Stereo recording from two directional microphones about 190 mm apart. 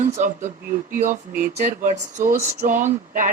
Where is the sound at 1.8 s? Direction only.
45° right (ahead or behind).